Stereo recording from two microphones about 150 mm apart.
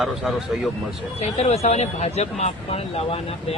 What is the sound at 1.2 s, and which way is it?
Speech, 45° left (ahead or behind).